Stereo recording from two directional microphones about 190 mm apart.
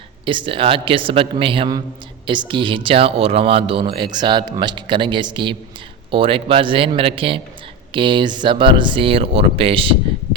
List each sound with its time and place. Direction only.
0.3 s speech: 25° right (ahead or behind)